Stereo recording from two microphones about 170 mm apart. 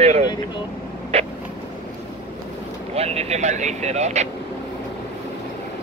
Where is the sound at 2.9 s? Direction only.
40° right (ahead or behind).